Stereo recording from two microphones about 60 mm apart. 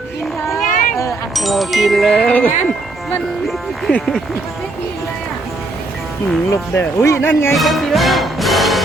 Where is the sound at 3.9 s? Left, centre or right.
Left.